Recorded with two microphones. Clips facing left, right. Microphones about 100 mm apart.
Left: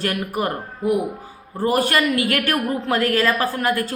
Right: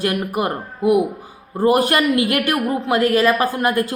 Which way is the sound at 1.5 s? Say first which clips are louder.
Right 3 dB; 25° right (ahead or behind).